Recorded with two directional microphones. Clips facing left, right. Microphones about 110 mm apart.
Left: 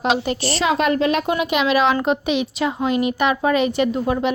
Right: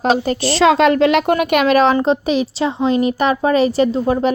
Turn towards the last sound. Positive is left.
turn(degrees=-30)  # may be behind; listen again after turning